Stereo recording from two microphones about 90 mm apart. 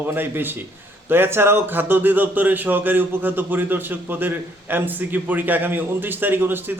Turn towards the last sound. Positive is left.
turn(degrees=-25)  # may be behind; listen again after turning